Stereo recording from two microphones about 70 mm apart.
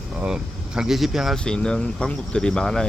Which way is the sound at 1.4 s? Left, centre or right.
Centre.